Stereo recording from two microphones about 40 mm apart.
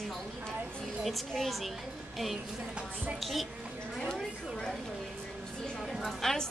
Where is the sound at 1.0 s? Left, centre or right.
Centre.